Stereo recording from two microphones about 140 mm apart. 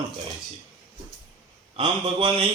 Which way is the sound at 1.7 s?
40° right (ahead or behind).